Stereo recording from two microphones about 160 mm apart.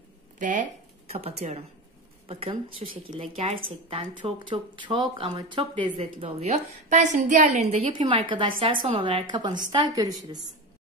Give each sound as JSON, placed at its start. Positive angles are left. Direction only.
{"t": 0.4, "sound": "speech", "side_deg": -55}
{"t": 1.1, "sound": "a woman's voice", "side_deg": -40}
{"t": 7.9, "sound": "speech", "side_deg": -30}